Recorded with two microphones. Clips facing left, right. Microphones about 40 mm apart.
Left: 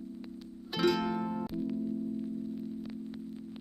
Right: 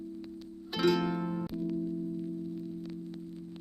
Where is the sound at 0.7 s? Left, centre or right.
Centre.